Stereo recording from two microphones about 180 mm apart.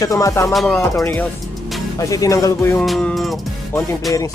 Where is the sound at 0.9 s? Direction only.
10° left (ahead or behind).